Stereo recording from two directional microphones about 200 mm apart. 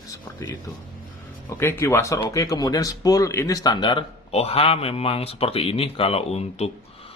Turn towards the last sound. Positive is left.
turn(degrees=30)  # may be behind; listen again after turning